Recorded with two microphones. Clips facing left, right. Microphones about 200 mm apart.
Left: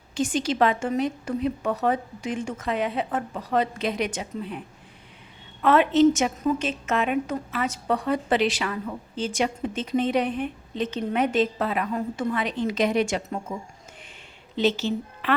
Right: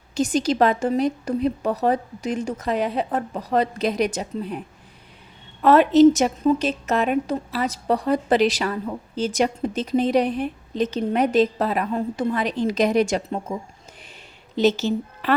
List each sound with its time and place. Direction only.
0.1 s a woman's voice: 40° right (ahead or behind)
5.6 s a woman's voice: 40° right (ahead or behind)
14.5 s a woman's voice: 40° right (ahead or behind)